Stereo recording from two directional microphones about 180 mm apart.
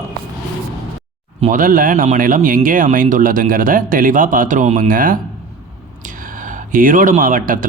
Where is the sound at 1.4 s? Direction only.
45° right (ahead or behind).